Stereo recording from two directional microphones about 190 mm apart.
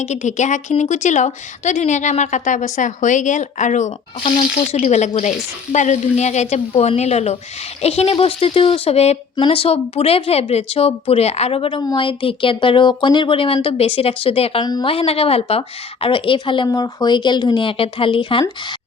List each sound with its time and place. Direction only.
0.0 s speech: 35° left (ahead or behind)